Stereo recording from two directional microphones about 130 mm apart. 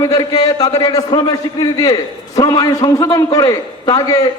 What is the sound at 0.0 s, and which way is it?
A man's voice, 25° left (ahead or behind).